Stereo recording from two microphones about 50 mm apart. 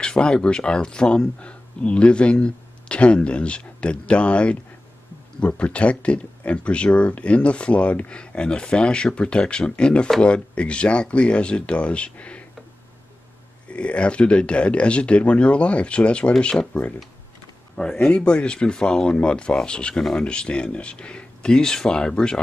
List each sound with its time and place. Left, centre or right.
0.0 s speech: centre
13.7 s speech: left
17.8 s speech: left